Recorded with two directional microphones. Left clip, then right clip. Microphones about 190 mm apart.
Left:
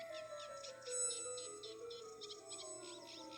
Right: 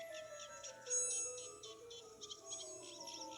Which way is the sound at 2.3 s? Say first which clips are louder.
Right 1 dB; centre (ahead or behind).